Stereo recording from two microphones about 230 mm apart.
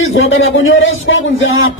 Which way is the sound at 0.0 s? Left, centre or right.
Left.